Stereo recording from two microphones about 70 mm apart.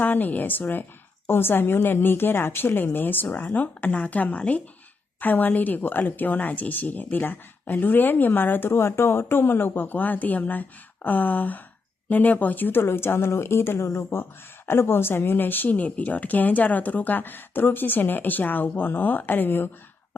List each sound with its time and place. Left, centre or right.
0.0 s speech: left